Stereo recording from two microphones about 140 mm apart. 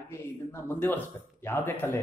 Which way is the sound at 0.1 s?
15° left (ahead or behind).